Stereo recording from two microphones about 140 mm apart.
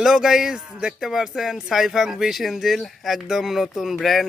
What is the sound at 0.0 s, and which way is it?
Speech, 5° right (ahead or behind).